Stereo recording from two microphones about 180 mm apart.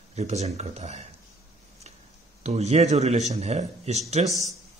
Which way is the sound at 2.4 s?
35° right (ahead or behind).